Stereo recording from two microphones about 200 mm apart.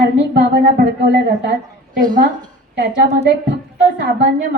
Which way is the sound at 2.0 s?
40° right (ahead or behind).